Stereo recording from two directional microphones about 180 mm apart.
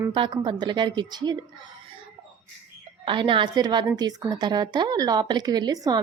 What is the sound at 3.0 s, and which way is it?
A woman's voice, 25° right (ahead or behind).